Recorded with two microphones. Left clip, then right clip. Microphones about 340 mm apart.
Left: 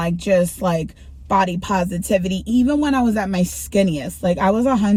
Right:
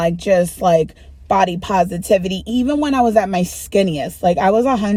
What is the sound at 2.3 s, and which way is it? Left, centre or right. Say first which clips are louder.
Speech: even; right.